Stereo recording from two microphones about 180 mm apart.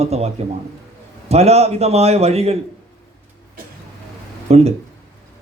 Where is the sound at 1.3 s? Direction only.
35° right (ahead or behind).